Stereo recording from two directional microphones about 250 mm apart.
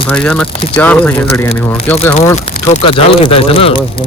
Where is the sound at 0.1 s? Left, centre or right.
Centre.